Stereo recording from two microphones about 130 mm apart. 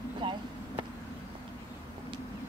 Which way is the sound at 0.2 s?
40° right (ahead or behind).